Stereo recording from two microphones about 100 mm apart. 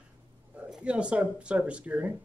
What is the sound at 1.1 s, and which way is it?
Speech, 10° right (ahead or behind).